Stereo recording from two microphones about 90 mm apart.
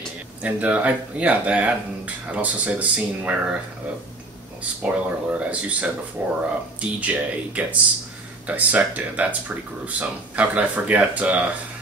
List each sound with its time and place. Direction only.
0.4 s speech: 15° right (ahead or behind)
4.8 s speech: 15° right (ahead or behind)